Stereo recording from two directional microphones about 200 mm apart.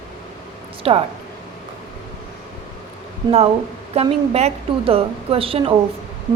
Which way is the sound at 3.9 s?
30° right (ahead or behind).